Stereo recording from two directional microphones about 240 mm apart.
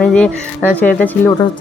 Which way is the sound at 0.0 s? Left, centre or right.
Centre.